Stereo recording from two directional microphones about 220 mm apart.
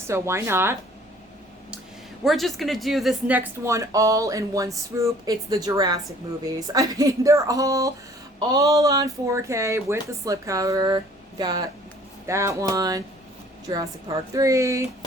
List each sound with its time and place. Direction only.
0.1 s speech: 10° right (ahead or behind)
2.2 s speech: centre (ahead or behind)